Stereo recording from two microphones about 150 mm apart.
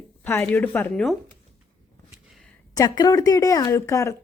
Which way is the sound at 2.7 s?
25° left (ahead or behind).